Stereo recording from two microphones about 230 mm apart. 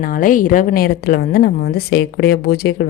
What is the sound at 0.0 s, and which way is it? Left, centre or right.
A woman's voice, left.